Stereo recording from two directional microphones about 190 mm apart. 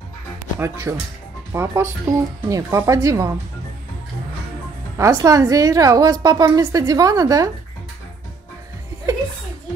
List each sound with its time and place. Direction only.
0.6 s a woman's voice: 15° right (ahead or behind)
4.9 s a woman's voice: 15° right (ahead or behind)